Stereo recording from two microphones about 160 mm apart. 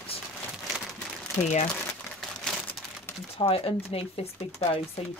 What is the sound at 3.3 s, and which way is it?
Speech, 35° left (ahead or behind).